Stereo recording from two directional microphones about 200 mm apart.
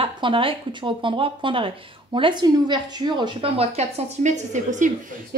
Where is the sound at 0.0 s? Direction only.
25° right (ahead or behind).